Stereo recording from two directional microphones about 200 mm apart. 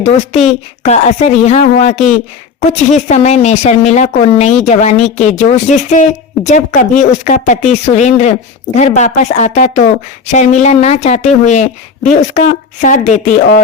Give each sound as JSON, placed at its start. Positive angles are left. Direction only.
{"t": 0.0, "sound": "a woman's voice", "side_deg": 35}